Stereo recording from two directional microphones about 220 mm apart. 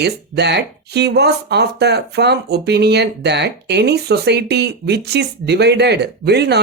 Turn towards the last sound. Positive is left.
turn(degrees=-50)  # may be behind; listen again after turning